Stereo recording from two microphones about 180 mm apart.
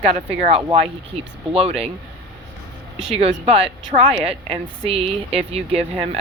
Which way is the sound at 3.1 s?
30° right (ahead or behind).